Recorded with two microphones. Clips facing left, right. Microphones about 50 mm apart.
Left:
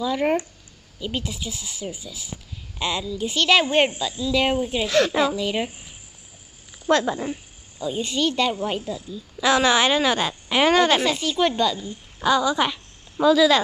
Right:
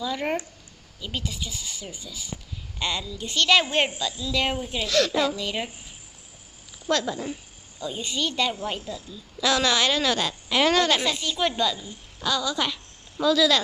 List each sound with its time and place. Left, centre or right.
0.0 s speech: centre
4.7 s speech: left
5.3 s speech: centre
6.9 s speech: left
7.8 s speech: centre
8.6 s speech: centre
11.8 s a woman's voice: left